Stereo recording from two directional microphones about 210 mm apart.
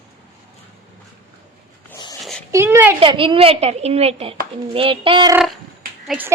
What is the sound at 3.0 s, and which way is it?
A woman's voice, 25° right (ahead or behind).